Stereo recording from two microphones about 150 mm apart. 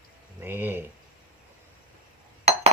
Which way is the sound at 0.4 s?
15° right (ahead or behind).